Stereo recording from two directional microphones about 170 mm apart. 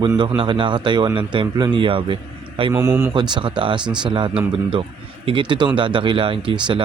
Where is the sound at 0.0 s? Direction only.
25° right (ahead or behind).